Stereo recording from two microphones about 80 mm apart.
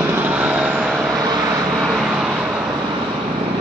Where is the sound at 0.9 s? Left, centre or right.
Centre.